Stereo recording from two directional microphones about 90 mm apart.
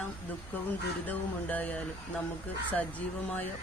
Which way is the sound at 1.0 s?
20° left (ahead or behind).